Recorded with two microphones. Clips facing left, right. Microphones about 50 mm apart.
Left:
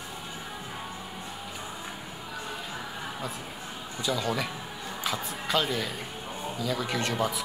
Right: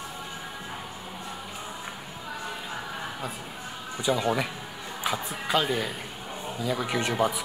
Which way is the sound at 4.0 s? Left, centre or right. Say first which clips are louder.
Right 4 dB; right.